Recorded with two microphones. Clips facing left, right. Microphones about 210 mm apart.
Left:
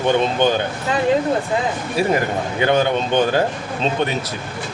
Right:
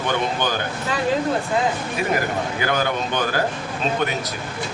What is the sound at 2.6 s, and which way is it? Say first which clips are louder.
Speech: left 7 dB; 25° left (ahead or behind).